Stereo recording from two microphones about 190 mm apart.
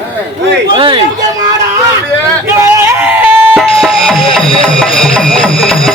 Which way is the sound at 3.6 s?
Centre (ahead or behind).